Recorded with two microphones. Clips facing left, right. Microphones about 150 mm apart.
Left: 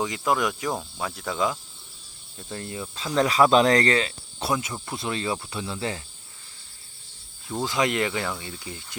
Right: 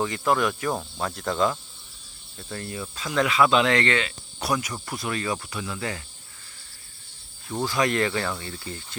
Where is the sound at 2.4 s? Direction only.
20° left (ahead or behind).